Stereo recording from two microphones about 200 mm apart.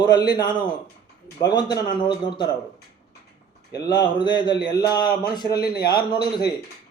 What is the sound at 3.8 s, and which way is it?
Speech, 20° left (ahead or behind).